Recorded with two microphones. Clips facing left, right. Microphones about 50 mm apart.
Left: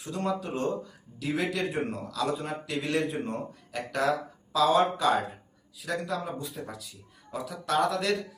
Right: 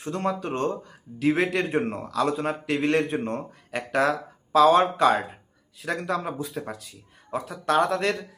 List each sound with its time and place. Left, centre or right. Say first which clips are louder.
0.0 s speech: right 3 dB; right